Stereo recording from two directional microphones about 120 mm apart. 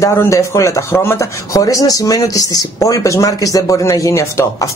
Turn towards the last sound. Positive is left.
turn(degrees=25)  # may be behind; listen again after turning